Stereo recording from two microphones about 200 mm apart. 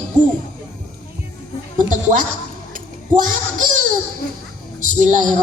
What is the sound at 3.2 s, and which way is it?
Speech, 40° right (ahead or behind).